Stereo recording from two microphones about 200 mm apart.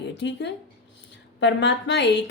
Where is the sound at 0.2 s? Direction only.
60° left (ahead or behind).